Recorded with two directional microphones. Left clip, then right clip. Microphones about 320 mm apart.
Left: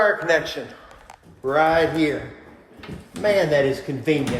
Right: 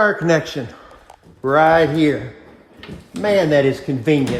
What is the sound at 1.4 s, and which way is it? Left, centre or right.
Speech, right.